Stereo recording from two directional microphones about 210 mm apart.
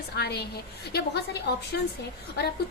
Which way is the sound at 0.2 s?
50° left (ahead or behind).